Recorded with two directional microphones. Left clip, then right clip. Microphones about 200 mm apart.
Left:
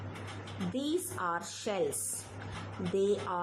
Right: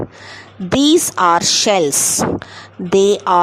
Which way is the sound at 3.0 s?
55° right (ahead or behind).